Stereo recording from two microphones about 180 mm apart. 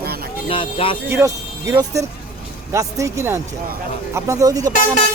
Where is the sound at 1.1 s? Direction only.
15° right (ahead or behind).